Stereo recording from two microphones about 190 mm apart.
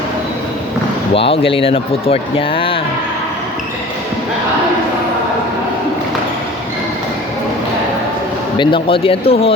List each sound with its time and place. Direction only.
1.1 s speech: 30° left (ahead or behind)
8.5 s speech: 25° left (ahead or behind)